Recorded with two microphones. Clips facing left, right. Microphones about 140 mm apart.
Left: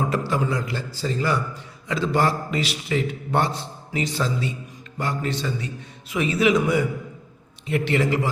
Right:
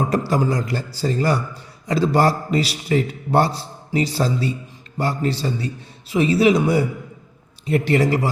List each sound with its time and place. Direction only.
0.1 s a man's voice: 40° right (ahead or behind)